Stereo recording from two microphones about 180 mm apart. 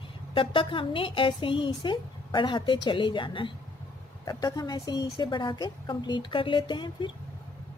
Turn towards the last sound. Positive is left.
turn(degrees=25)  # may be behind; listen again after turning